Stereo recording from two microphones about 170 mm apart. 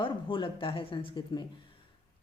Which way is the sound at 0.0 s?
30° left (ahead or behind).